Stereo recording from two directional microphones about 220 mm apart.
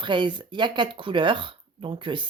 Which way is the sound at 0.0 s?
20° right (ahead or behind).